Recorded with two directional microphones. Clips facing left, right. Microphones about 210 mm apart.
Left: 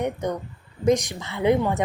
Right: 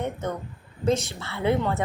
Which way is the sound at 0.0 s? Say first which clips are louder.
Left 3 dB; 15° left (ahead or behind).